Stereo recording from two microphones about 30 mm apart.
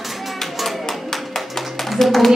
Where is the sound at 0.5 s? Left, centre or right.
Centre.